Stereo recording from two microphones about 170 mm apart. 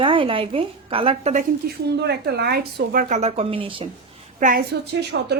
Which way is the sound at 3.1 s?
40° right (ahead or behind).